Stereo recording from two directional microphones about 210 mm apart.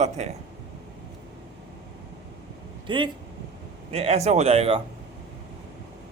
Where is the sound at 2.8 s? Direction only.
25° right (ahead or behind).